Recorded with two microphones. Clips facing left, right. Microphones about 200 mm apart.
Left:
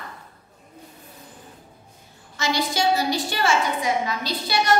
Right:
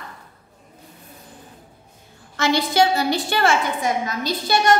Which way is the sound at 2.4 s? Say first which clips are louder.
Right 6 dB; 60° right (ahead or behind).